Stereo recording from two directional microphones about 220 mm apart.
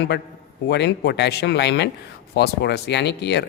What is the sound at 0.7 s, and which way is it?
Speech, 50° left (ahead or behind).